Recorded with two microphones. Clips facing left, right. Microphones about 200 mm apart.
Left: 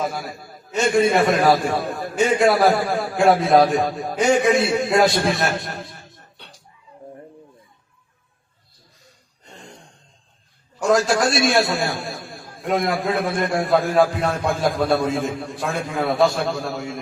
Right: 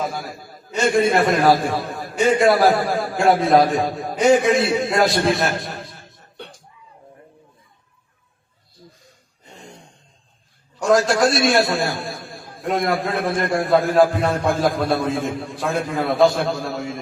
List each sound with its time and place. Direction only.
0.0 s a man's voice: centre (ahead or behind)
6.3 s music: 50° right (ahead or behind)
9.4 s gasp: 5° right (ahead or behind)
10.8 s a man's voice: centre (ahead or behind)